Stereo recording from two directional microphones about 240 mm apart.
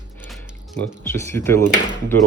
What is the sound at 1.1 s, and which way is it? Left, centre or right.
Speech, centre.